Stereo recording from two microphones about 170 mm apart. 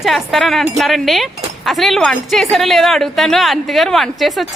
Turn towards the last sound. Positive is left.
turn(degrees=0)  # may be behind; listen again after turning